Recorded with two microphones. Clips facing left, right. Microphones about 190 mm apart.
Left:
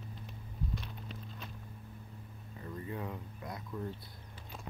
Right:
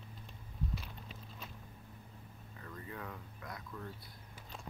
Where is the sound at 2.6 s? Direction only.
20° left (ahead or behind).